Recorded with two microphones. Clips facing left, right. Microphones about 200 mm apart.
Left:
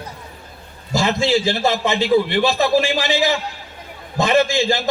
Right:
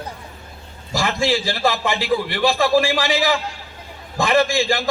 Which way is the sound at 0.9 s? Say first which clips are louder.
Left 3 dB; 25° left (ahead or behind).